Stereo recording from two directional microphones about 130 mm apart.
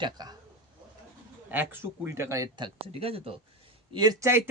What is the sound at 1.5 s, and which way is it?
Speech, 15° right (ahead or behind).